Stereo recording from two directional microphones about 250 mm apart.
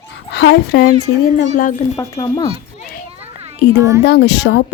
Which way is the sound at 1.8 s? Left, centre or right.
Left.